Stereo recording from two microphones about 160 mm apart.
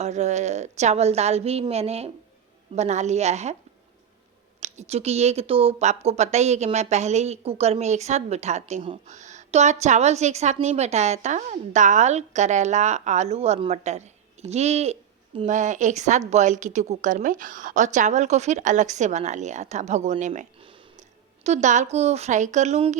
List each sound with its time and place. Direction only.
0.0 s a woman's voice: 45° right (ahead or behind)
4.6 s a woman's voice: 45° right (ahead or behind)
20.6 s a sound: 30° right (ahead or behind)
21.4 s a woman's voice: 45° right (ahead or behind)